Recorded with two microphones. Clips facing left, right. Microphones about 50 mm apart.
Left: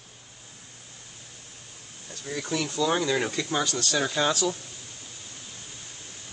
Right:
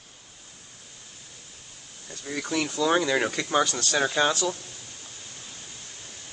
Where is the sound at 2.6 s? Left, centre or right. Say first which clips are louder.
Right 3 dB; right.